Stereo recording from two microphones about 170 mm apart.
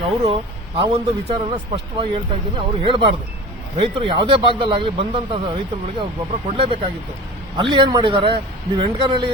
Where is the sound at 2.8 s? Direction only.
30° right (ahead or behind).